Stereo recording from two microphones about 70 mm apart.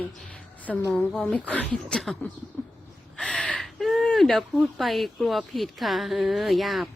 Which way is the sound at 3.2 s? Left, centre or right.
Centre.